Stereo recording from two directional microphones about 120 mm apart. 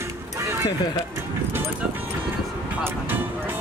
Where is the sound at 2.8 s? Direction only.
15° right (ahead or behind).